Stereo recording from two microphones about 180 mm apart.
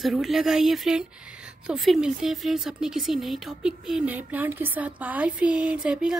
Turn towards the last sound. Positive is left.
turn(degrees=-5)  # may be behind; listen again after turning